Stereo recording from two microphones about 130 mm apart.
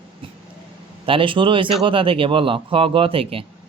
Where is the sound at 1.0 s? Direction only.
40° right (ahead or behind).